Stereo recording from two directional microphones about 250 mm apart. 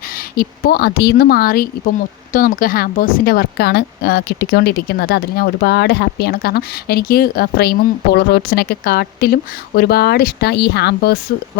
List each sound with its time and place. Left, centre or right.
0.1 s a woman's voice: left